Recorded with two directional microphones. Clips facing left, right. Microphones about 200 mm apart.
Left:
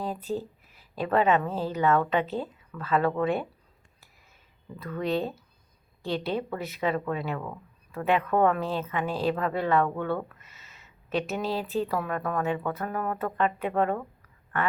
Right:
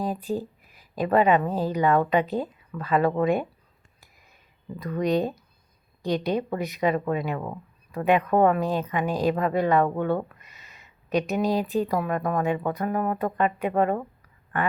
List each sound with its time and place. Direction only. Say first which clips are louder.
0.0 s speech: right 3 dB; 10° right (ahead or behind)
4.8 s speech: right 4 dB; 15° right (ahead or behind)